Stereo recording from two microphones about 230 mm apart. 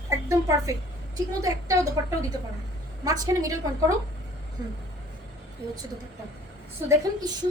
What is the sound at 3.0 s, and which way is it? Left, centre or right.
Speech, centre.